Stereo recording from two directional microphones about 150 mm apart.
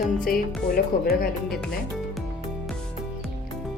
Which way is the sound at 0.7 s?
90° left.